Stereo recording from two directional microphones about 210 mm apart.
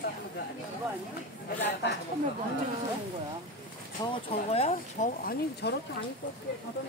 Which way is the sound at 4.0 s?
25° left (ahead or behind).